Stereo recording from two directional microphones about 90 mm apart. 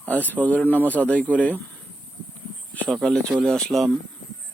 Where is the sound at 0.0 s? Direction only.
20° left (ahead or behind).